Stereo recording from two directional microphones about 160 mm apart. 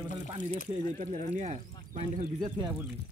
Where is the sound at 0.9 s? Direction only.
45° right (ahead or behind).